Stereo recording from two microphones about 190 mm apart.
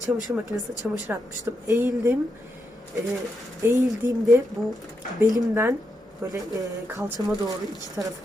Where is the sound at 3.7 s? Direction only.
15° right (ahead or behind).